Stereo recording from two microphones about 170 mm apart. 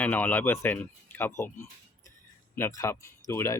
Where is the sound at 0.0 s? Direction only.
10° left (ahead or behind).